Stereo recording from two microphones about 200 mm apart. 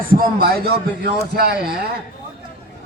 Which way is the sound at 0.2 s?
50° right (ahead or behind).